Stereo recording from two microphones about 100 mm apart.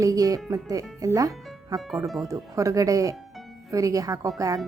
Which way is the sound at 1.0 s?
35° right (ahead or behind).